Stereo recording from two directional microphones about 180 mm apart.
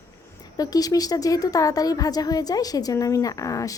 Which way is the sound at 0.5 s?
20° left (ahead or behind).